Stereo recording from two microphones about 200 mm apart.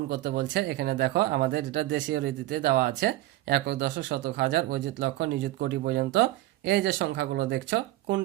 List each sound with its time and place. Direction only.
0.1 s speech: 55° right (ahead or behind)